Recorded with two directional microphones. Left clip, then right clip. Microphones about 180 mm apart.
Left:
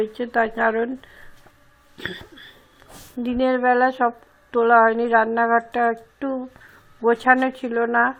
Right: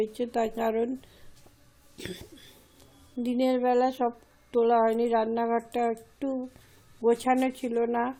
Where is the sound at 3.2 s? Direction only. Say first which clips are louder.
Left 7 dB; 5° right (ahead or behind).